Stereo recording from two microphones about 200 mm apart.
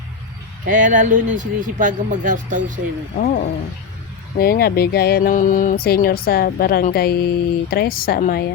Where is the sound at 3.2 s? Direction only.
50° left (ahead or behind).